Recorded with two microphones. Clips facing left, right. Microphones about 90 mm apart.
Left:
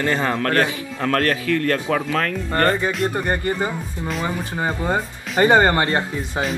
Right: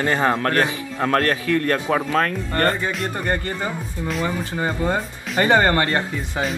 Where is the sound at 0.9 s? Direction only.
30° right (ahead or behind).